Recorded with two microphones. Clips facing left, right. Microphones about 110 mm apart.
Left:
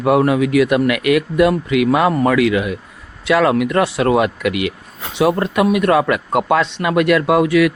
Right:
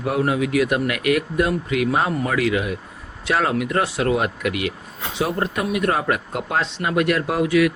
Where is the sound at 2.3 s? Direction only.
90° left.